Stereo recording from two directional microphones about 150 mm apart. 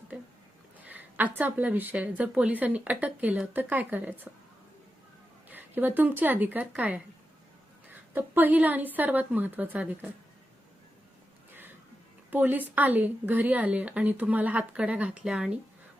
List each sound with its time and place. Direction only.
0.9 s a woman's voice: 10° right (ahead or behind)
5.5 s speech: 10° right (ahead or behind)
8.1 s a woman's voice: 10° right (ahead or behind)
12.3 s a woman's voice: 10° right (ahead or behind)